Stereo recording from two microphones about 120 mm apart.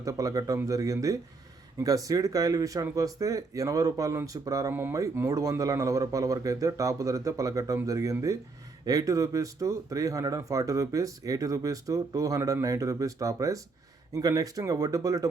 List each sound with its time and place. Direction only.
0.0 s speech: 30° right (ahead or behind)